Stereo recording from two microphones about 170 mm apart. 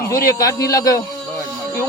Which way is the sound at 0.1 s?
20° left (ahead or behind).